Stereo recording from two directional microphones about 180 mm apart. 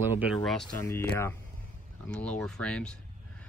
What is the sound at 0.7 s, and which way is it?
Speech, 15° left (ahead or behind).